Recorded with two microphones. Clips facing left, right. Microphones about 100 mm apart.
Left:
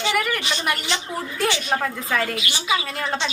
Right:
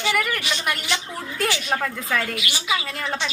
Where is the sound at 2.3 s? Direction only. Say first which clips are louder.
Left 2 dB; 25° left (ahead or behind).